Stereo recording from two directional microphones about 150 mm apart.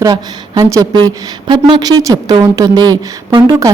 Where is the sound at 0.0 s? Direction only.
25° right (ahead or behind).